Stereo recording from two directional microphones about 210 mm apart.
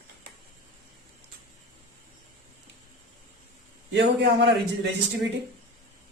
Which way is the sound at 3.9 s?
55° right (ahead or behind).